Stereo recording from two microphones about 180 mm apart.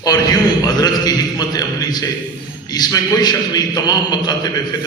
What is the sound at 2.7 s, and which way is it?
A man's voice, 20° left (ahead or behind).